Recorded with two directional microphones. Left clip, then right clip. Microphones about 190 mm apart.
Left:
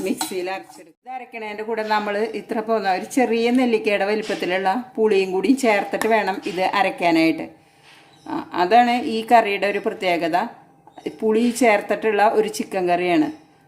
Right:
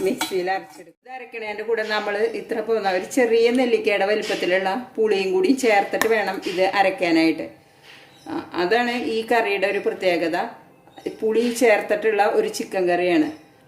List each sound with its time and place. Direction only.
0.0 s speech: 50° left (ahead or behind)